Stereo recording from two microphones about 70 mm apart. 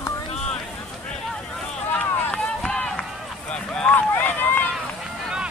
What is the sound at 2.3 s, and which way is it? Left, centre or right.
Run, centre.